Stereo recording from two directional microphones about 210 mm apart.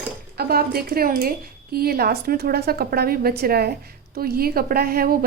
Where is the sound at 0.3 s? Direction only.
45° right (ahead or behind).